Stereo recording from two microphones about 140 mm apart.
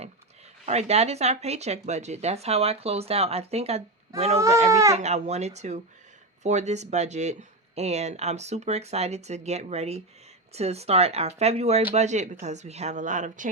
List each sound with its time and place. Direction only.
0.6 s speech: 50° right (ahead or behind)
4.7 s speech: 20° right (ahead or behind)
4.9 s speech: 55° right (ahead or behind)